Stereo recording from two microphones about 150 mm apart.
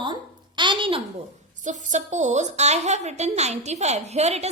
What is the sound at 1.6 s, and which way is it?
A child's voice, 55° right (ahead or behind).